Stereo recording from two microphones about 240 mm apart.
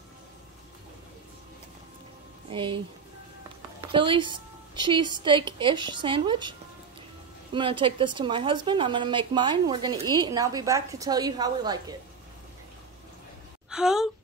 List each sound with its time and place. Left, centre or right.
2.5 s a woman's voice: right
3.9 s a woman's voice: right
7.5 s a woman's voice: right
13.7 s a sound: centre